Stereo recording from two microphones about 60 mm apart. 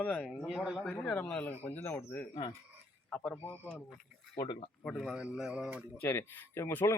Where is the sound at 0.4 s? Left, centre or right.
Right.